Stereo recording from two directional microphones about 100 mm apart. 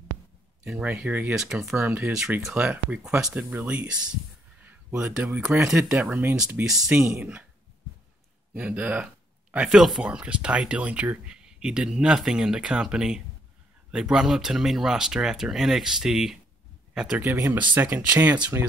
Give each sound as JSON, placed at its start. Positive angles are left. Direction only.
{"t": 0.7, "sound": "speech", "side_deg": -10}
{"t": 1.8, "sound": "speech", "side_deg": -20}
{"t": 4.6, "sound": "a sound", "side_deg": -15}
{"t": 5.0, "sound": "speech", "side_deg": -10}
{"t": 8.5, "sound": "speech", "side_deg": -15}
{"t": 17.2, "sound": "speech", "side_deg": -20}